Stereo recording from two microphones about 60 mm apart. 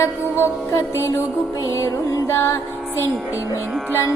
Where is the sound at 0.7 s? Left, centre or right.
Left.